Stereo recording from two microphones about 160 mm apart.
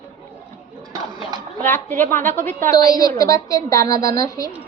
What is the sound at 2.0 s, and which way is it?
A woman's voice, 15° left (ahead or behind).